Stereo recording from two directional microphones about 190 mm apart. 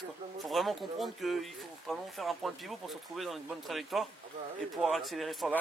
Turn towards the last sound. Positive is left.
turn(degrees=0)  # may be behind; listen again after turning